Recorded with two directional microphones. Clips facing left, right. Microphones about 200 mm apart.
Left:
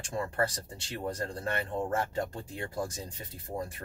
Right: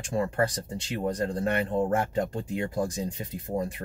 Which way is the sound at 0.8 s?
15° right (ahead or behind).